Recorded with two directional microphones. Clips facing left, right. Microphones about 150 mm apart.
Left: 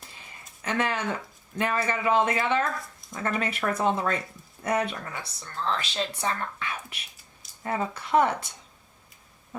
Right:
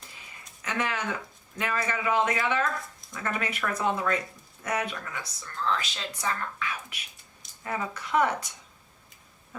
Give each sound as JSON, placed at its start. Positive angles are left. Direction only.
{"t": 0.6, "sound": "speech", "side_deg": 30}